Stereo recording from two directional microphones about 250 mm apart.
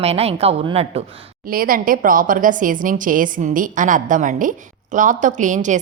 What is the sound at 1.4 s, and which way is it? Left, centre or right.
A woman's voice, right.